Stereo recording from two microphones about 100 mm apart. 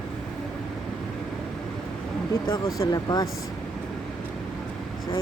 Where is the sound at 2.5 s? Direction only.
40° left (ahead or behind).